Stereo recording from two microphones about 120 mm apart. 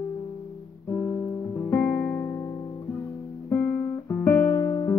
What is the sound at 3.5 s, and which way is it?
Guitar, 20° left (ahead or behind).